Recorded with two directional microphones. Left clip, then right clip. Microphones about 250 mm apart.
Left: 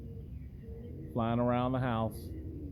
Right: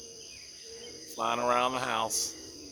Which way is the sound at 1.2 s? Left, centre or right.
Centre.